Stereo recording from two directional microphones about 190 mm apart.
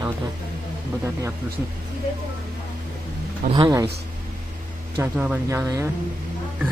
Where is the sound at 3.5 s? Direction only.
20° right (ahead or behind).